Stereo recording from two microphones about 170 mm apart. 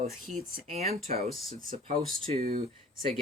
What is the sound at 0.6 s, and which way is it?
Speech, 40° right (ahead or behind).